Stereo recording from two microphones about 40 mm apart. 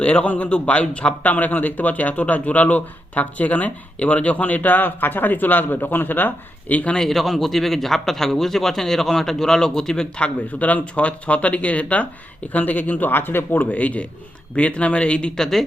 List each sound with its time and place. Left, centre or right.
0.0 s speech: left
1.2 s a man's voice: left
7.1 s a man's voice: centre
10.2 s a man's voice: left
13.7 s speech: left
15.4 s a man's voice: centre